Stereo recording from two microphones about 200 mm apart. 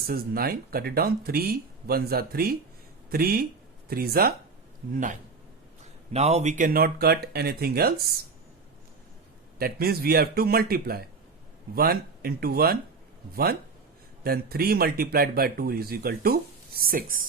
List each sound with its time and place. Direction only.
0.1 s speech: 50° right (ahead or behind)
6.1 s speech: 30° right (ahead or behind); by 7.9 s 50° right (ahead or behind)
9.6 s speech: 50° right (ahead or behind)